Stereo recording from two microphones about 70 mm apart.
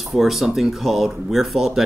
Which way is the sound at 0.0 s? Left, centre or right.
Centre.